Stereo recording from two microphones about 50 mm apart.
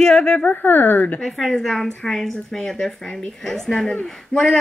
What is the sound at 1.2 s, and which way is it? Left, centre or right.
A woman's voice, centre.